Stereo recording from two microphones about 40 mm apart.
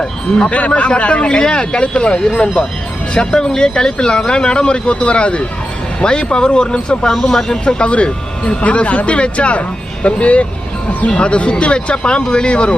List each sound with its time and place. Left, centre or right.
0.0 s speech: centre
0.7 s speech: left
7.1 s speech: centre; by 12.7 s left